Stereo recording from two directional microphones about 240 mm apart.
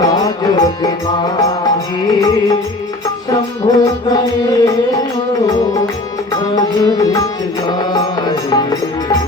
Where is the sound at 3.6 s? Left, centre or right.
Centre.